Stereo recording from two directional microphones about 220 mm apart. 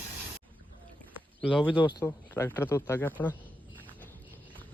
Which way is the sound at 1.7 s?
20° left (ahead or behind).